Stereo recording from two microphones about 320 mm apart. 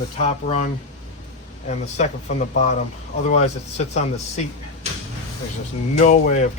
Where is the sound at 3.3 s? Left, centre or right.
Left.